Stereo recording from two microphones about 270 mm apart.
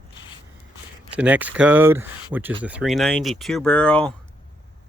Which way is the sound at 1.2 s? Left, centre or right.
Centre.